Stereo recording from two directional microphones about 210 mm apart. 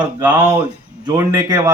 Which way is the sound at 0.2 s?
15° right (ahead or behind).